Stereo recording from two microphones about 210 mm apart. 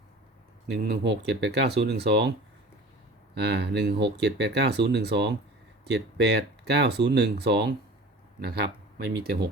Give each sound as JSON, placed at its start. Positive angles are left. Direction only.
{"t": 0.7, "sound": "speech", "side_deg": -55}
{"t": 3.3, "sound": "speech", "side_deg": -55}